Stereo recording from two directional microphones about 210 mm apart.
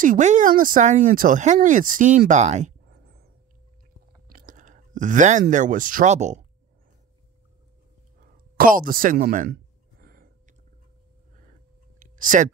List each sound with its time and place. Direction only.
0.0 s speech: 35° right (ahead or behind)
4.3 s speech: 40° right (ahead or behind)
8.2 s a sound: 40° right (ahead or behind)
12.2 s speech: 40° right (ahead or behind)